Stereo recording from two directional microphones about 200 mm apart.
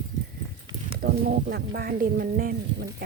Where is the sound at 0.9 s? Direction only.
50° right (ahead or behind).